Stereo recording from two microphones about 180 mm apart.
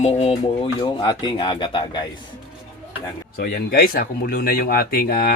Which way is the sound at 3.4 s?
60° left (ahead or behind).